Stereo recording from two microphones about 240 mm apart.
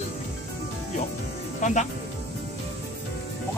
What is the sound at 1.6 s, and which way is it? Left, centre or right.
Speech, left.